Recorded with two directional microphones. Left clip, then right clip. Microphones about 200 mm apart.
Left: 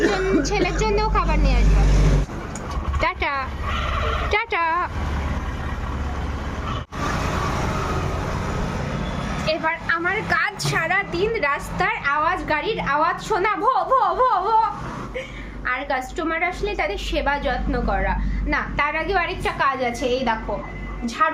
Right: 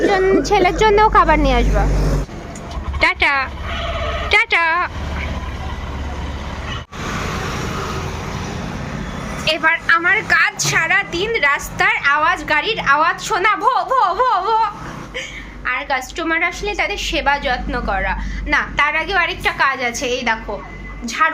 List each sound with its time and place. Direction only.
0.0 s speech: 20° right (ahead or behind)
3.0 s a woman's voice: 5° right (ahead or behind)
9.5 s a woman's voice: 5° left (ahead or behind); by 21.4 s 15° right (ahead or behind)